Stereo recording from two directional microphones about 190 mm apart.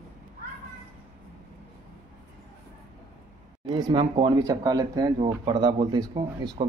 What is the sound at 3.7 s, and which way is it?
Speech, 20° right (ahead or behind).